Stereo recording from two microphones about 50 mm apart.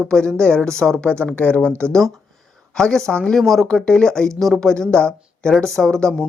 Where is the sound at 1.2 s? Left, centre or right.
Left.